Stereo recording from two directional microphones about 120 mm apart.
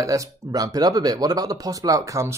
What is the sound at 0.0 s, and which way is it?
Speech, 25° right (ahead or behind).